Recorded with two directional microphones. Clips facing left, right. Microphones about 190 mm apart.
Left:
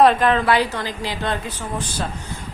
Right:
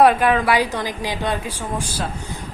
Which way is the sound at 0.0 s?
10° right (ahead or behind).